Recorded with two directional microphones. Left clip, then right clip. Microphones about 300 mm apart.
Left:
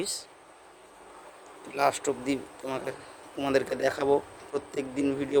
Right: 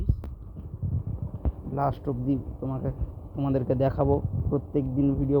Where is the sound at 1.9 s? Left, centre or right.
Centre.